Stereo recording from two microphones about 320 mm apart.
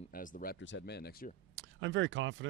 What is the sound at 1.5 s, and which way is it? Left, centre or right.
Speech, right.